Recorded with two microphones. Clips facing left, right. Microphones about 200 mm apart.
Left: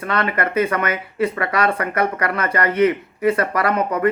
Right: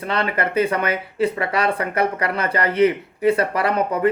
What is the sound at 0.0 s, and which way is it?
Speech, 30° right (ahead or behind).